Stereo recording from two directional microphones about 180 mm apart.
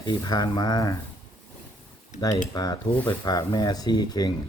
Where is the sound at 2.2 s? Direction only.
20° left (ahead or behind).